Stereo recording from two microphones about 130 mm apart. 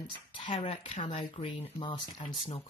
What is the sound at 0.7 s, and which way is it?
Speech, 50° left (ahead or behind).